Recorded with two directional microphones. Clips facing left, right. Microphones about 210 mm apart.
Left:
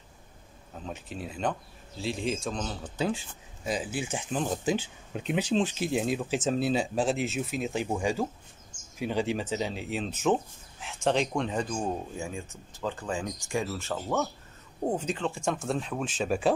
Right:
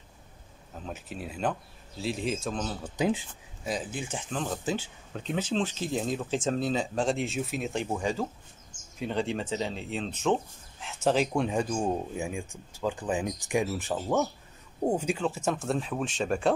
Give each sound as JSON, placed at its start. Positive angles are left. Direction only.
{"t": 0.8, "sound": "speech", "side_deg": -5}
{"t": 3.6, "sound": "speech", "side_deg": 5}